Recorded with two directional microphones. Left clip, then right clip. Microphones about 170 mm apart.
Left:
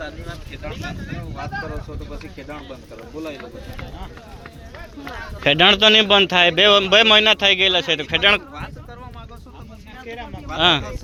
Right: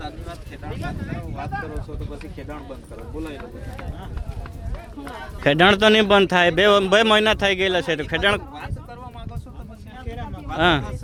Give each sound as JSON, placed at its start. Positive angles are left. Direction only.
{"t": 5.1, "sound": "speech", "side_deg": -35}
{"t": 10.6, "sound": "speech", "side_deg": -40}